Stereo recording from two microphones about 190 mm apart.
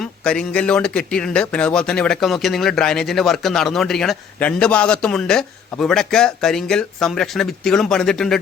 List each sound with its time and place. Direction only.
0.0 s speech: 5° left (ahead or behind)